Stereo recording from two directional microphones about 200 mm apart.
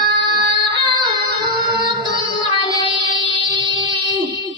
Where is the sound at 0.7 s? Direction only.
25° right (ahead or behind).